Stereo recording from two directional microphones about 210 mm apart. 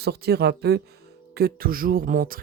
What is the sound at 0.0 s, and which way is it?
Speech, 50° right (ahead or behind).